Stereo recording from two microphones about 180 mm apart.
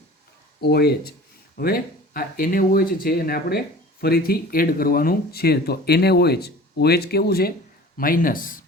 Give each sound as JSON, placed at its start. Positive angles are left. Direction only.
{"t": 0.6, "sound": "speech", "side_deg": 65}